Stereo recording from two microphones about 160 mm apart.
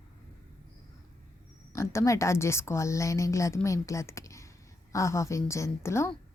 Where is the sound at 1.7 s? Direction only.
20° left (ahead or behind).